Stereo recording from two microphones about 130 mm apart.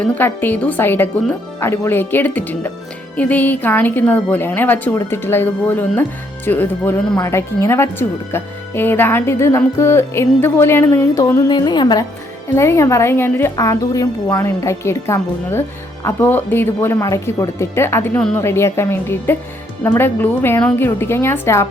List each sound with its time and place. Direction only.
0.0 s speech: 15° left (ahead or behind)
11.5 s a woman's voice: 35° left (ahead or behind)
12.5 s a woman's voice: 20° left (ahead or behind)